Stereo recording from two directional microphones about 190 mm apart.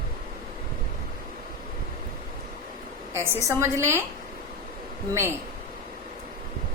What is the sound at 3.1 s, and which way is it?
Speech, 15° right (ahead or behind).